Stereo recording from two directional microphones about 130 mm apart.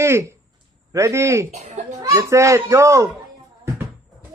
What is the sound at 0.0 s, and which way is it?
A child's voice, 20° right (ahead or behind).